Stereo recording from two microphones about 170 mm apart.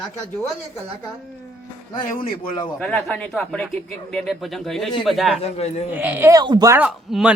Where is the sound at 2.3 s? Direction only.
25° left (ahead or behind).